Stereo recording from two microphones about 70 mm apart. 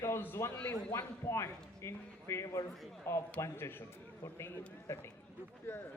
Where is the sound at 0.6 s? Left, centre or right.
Left.